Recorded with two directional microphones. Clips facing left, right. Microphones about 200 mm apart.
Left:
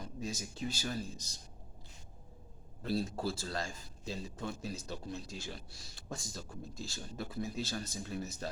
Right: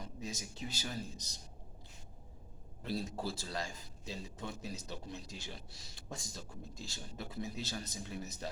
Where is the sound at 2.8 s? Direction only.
15° right (ahead or behind).